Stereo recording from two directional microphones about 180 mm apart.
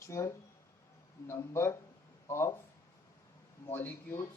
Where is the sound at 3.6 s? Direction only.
15° left (ahead or behind).